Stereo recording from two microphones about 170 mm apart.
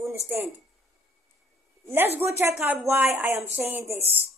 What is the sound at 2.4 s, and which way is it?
A man's voice, 15° right (ahead or behind).